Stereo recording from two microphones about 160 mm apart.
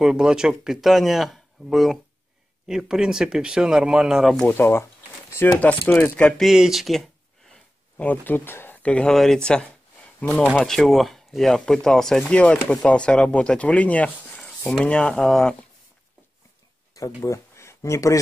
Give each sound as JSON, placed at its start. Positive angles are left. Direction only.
{"t": 0.0, "sound": "speech", "side_deg": -5}
{"t": 16.9, "sound": "speech", "side_deg": 20}